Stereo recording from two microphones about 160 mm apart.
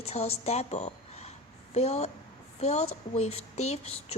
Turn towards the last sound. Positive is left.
turn(degrees=40)  # may be behind; listen again after turning